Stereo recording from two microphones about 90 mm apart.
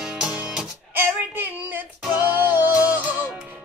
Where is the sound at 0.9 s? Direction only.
20° right (ahead or behind).